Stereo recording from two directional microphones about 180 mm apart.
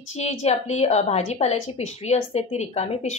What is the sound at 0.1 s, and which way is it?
A woman's voice, 35° left (ahead or behind).